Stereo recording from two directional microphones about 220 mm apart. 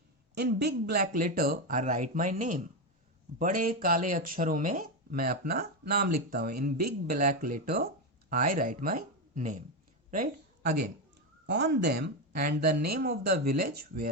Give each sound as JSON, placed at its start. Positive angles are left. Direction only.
{"t": 0.3, "sound": "speech", "side_deg": -50}
{"t": 11.4, "sound": "speech", "side_deg": -50}